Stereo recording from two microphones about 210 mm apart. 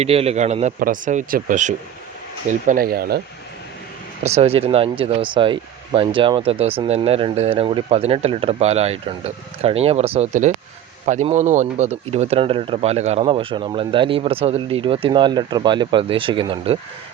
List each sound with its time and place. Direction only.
0.0 s speech: 30° right (ahead or behind); by 3.2 s 45° right (ahead or behind)
4.2 s speech: 30° right (ahead or behind)